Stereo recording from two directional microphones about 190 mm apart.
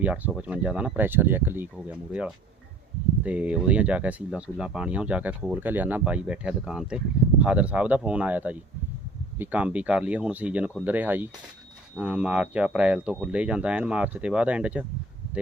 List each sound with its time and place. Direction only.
0.0 s speech: 5° right (ahead or behind)